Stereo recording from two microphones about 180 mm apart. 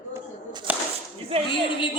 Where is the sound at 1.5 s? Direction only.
25° left (ahead or behind).